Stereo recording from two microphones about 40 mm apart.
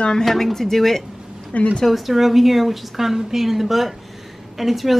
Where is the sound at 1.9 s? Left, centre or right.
Centre.